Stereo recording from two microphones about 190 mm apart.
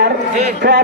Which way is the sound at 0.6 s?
60° right (ahead or behind).